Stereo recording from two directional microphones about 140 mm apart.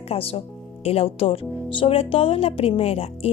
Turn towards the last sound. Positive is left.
turn(degrees=45)  # may be behind; listen again after turning